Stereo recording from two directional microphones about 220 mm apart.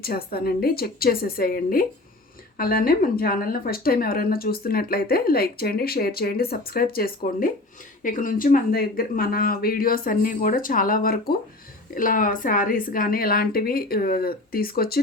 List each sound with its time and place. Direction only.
0.0 s a woman's voice: 45° left (ahead or behind)